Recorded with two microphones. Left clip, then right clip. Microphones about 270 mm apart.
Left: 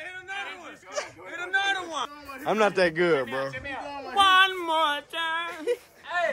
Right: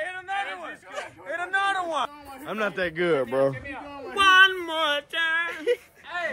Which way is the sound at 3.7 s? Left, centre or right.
Left.